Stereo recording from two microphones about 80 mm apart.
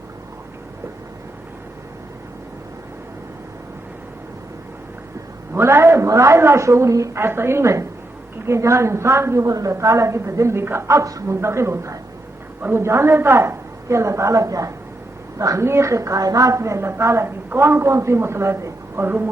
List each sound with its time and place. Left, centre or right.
5.5 s a woman's voice: right